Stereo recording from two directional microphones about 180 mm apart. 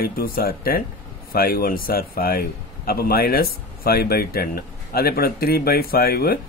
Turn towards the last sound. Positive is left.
turn(degrees=55)  # may be behind; listen again after turning